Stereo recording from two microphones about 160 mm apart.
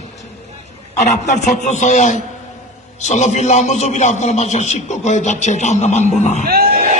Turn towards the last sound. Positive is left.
turn(degrees=-70)  # may be behind; listen again after turning